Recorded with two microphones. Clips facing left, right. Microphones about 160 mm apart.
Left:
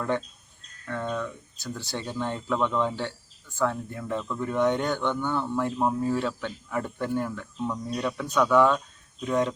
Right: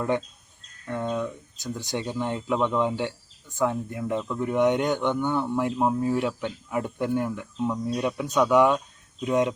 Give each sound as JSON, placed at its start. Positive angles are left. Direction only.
{"t": 0.9, "sound": "speech", "side_deg": -15}